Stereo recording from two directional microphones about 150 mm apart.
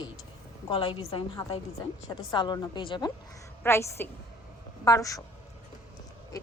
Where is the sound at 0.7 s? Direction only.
35° left (ahead or behind).